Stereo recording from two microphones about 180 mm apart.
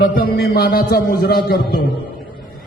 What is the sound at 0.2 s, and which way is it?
A man's voice, 55° left (ahead or behind).